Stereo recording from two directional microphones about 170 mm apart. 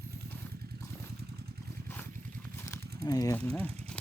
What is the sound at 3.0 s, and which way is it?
Speech, 20° left (ahead or behind).